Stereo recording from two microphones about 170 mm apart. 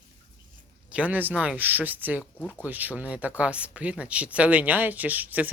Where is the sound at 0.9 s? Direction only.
10° right (ahead or behind).